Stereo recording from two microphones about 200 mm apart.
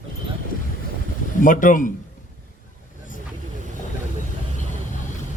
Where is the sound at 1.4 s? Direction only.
40° left (ahead or behind).